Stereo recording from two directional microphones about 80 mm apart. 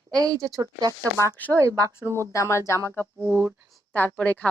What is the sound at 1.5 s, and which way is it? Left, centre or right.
Speech, right.